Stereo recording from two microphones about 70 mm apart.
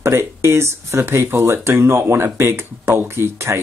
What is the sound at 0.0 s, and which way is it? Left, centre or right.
Speech, right.